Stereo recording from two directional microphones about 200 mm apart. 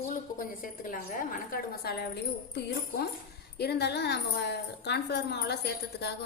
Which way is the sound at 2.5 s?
60° left (ahead or behind).